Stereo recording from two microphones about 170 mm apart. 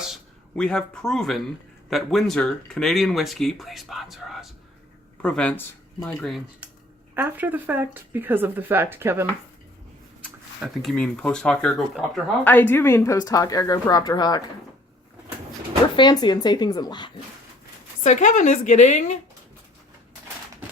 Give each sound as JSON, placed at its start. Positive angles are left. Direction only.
{"t": 0.0, "sound": "speech", "side_deg": 0}
{"t": 7.1, "sound": "speech", "side_deg": -10}
{"t": 10.6, "sound": "speech", "side_deg": -5}
{"t": 10.9, "sound": "speech", "side_deg": 5}
{"t": 16.0, "sound": "speech", "side_deg": 25}
{"t": 18.0, "sound": "a woman's voice", "side_deg": 45}